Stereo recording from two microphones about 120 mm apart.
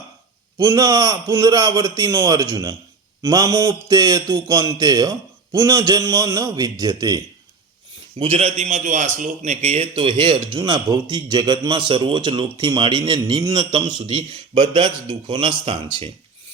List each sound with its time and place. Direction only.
0.6 s speech: 30° right (ahead or behind)
8.2 s a man's voice: 55° right (ahead or behind)
8.5 s a man's voice: 85° right; by 16.1 s 50° right (ahead or behind)